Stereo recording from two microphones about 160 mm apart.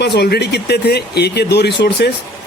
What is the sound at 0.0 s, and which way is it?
Speech, 90° left.